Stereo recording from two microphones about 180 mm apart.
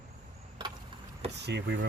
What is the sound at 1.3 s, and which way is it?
Cricket, 70° right (ahead or behind).